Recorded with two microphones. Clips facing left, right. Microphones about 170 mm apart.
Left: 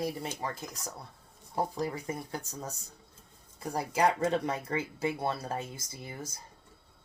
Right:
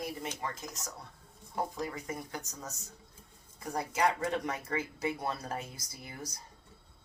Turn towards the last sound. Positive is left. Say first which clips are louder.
# left 3 dB
turn(degrees=25)  # may be behind; listen again after turning